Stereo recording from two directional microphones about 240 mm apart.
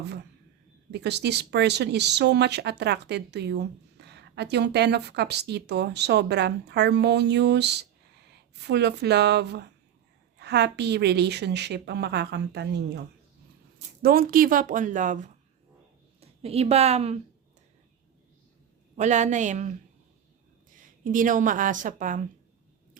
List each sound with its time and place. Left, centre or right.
0.0 s a woman's voice: right
18.9 s a woman's voice: right